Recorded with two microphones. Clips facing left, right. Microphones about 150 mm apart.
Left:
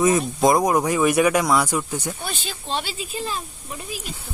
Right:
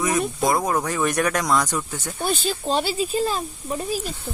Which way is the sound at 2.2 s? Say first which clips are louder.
Right 8 dB; 40° right (ahead or behind).